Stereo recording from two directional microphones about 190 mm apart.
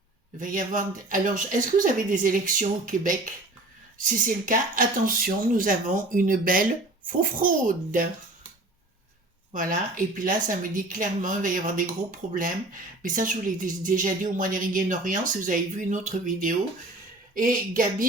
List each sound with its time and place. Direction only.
0.3 s speech: 45° right (ahead or behind)
9.5 s speech: 45° right (ahead or behind)